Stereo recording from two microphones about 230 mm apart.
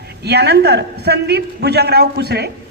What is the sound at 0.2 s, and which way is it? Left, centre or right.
A man's voice, right.